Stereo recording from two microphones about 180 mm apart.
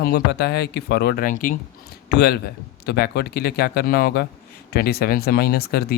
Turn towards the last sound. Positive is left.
turn(degrees=60)  # may be behind; listen again after turning